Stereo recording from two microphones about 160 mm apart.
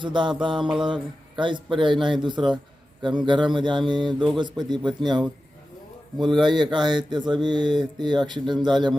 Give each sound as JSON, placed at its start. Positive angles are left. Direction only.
{"t": 0.0, "sound": "speech", "side_deg": -30}
{"t": 0.5, "sound": "mantra", "side_deg": -5}
{"t": 1.4, "sound": "speech", "side_deg": -30}
{"t": 6.4, "sound": "speech", "side_deg": -30}